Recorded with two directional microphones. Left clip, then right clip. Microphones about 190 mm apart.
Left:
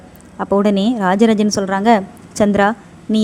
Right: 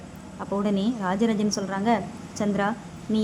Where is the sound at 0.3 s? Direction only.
40° left (ahead or behind).